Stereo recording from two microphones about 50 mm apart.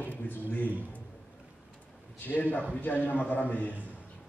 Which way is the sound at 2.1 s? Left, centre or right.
Left.